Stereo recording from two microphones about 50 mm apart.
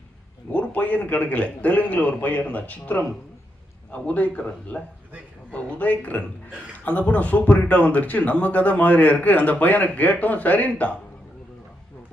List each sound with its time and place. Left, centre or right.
0.5 s a man's voice: left